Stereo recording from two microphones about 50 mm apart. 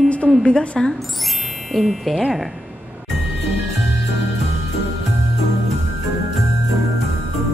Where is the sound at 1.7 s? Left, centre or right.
Centre.